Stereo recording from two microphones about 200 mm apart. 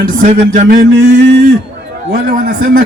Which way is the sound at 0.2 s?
40° right (ahead or behind).